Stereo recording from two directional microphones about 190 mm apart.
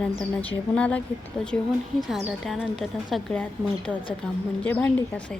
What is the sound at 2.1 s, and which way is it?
A woman's voice, centre (ahead or behind).